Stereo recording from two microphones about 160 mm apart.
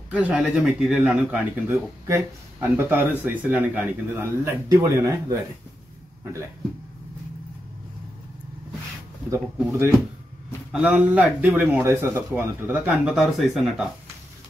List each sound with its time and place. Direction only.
0.1 s speech: 5° right (ahead or behind)
1.7 s speech: 15° right (ahead or behind)
9.3 s speech: 15° right (ahead or behind); by 13.8 s centre (ahead or behind)